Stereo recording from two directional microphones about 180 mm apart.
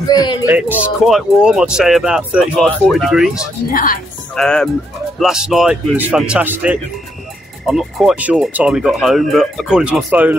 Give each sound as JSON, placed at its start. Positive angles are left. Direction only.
{"t": 0.1, "sound": "speech", "side_deg": 20}
{"t": 0.5, "sound": "speech", "side_deg": -10}
{"t": 3.7, "sound": "a woman's voice", "side_deg": 50}
{"t": 4.4, "sound": "speech", "side_deg": 5}